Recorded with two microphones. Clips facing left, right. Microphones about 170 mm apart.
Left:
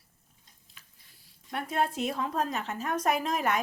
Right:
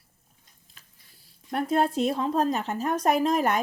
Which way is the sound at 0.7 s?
40° right (ahead or behind).